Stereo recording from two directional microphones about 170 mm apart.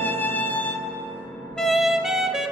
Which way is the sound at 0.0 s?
10° left (ahead or behind).